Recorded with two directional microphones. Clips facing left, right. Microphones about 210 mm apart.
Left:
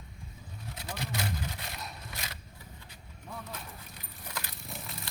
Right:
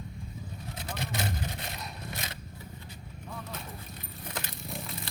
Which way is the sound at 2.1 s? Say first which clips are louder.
Right 4 dB; 25° right (ahead or behind).